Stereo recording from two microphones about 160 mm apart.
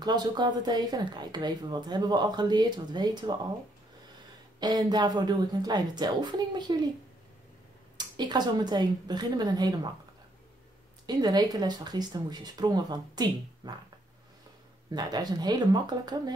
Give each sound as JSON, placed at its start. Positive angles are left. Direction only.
{"t": 0.0, "sound": "a woman's voice", "side_deg": -25}
{"t": 4.6, "sound": "a woman's voice", "side_deg": -25}
{"t": 8.2, "sound": "a woman's voice", "side_deg": -25}
{"t": 11.1, "sound": "a woman's voice", "side_deg": -25}
{"t": 14.9, "sound": "a woman's voice", "side_deg": -25}